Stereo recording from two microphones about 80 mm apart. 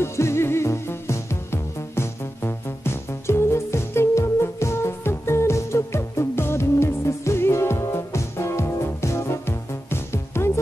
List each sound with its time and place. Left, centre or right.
0.0 s music: left